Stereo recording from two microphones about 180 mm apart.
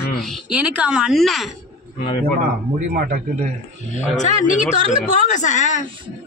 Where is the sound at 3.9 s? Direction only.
45° left (ahead or behind).